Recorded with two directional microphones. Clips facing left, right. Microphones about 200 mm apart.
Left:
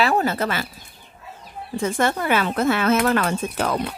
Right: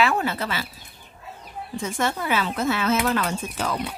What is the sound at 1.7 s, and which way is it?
Speech, 55° left (ahead or behind).